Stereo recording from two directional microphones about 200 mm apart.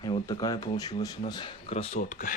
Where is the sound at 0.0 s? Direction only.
20° left (ahead or behind).